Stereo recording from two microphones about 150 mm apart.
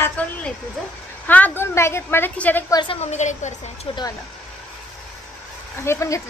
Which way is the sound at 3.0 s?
50° left (ahead or behind).